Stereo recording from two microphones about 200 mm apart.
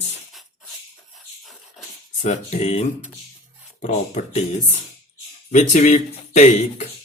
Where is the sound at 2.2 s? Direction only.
35° left (ahead or behind).